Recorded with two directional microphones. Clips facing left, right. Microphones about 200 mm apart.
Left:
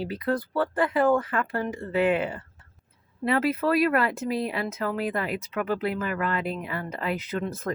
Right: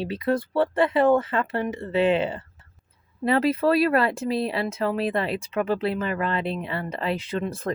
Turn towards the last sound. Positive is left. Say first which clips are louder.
# right 2 dB
turn(degrees=-30)  # may be behind; listen again after turning